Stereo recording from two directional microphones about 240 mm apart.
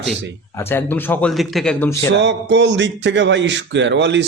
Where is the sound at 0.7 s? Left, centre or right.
Centre.